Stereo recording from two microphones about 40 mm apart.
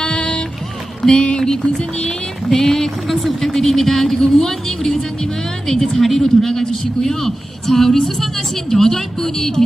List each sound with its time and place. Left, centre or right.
0.0 s music: left
2.5 s speech: centre